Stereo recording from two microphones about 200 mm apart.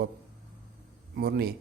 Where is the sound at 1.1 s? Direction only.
50° right (ahead or behind).